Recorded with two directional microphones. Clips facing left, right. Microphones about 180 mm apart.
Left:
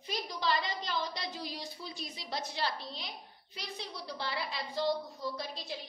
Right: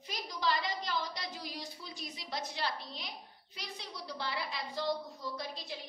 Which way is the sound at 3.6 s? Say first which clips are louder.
Left 3 dB; 30° left (ahead or behind).